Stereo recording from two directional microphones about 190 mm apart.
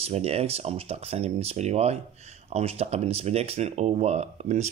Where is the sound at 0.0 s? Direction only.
35° right (ahead or behind).